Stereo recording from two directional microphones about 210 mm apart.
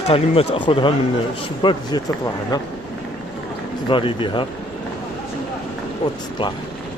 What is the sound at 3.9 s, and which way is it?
Speech, 25° left (ahead or behind).